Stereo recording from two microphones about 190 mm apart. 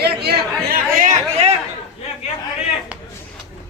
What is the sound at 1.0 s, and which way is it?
Chatter, 35° right (ahead or behind).